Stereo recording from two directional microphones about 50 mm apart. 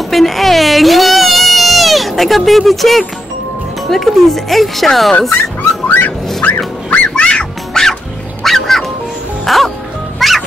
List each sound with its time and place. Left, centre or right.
0.1 s baby cry: centre
3.8 s speech: centre
5.6 s a sound: left
6.9 s fowl: left
7.8 s music: centre
9.5 s speech: centre
10.1 s music: centre